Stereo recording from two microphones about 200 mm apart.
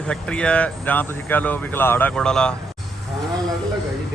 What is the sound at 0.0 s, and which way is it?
A man's voice, 5° left (ahead or behind).